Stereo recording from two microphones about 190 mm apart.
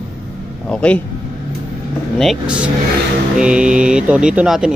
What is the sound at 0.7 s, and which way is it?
Speech, 5° left (ahead or behind).